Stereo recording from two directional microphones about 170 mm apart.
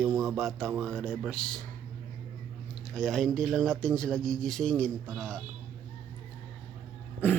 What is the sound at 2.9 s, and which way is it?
Speech, 5° left (ahead or behind).